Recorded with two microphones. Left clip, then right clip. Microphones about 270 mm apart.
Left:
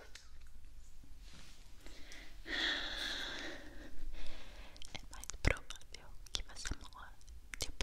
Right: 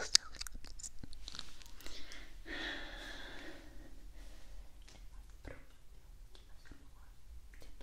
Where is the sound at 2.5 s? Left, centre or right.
Centre.